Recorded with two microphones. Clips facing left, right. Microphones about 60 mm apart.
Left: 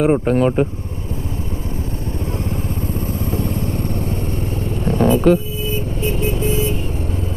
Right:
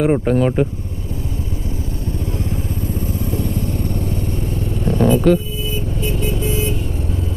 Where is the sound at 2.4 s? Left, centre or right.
Left.